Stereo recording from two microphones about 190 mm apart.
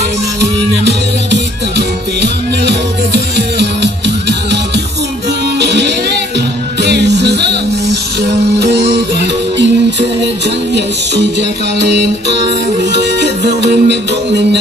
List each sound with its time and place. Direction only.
0.4 s music: 60° right (ahead or behind)